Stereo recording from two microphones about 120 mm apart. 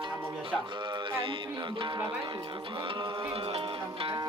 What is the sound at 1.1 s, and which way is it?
Music, 45° right (ahead or behind).